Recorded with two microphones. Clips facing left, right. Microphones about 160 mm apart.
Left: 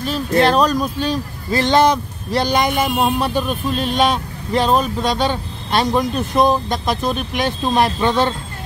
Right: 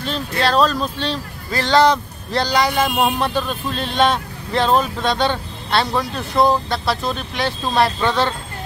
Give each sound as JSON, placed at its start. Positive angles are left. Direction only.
{"t": 0.4, "sound": "speech", "side_deg": 20}